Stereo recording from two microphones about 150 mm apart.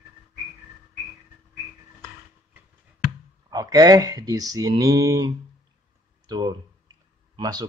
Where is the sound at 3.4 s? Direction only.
25° right (ahead or behind).